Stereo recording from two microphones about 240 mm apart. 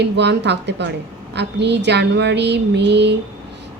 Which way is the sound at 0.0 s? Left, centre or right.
Right.